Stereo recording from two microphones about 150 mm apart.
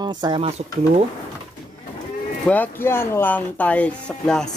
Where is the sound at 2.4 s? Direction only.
10° left (ahead or behind).